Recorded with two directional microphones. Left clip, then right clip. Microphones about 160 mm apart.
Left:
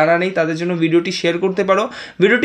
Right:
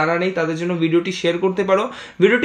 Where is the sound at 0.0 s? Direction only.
45° left (ahead or behind).